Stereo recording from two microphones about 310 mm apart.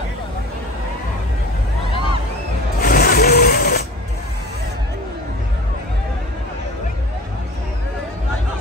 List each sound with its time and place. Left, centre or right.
2.8 s sewing machine: left